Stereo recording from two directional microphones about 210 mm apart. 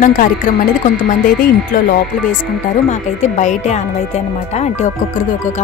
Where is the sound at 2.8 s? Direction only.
35° left (ahead or behind).